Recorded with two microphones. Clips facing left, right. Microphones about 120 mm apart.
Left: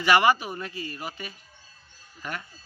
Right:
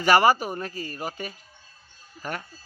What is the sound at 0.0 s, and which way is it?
A man's voice, 40° right (ahead or behind).